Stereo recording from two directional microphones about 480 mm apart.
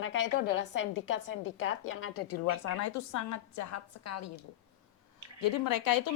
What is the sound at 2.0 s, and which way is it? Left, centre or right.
A woman's voice, left.